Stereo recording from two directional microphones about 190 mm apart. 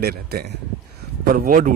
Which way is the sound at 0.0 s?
55° right (ahead or behind).